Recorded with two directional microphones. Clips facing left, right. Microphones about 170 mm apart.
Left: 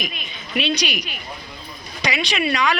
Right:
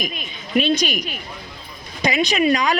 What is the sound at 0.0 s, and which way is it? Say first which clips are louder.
A man's voice: right 3 dB; 45° right (ahead or behind).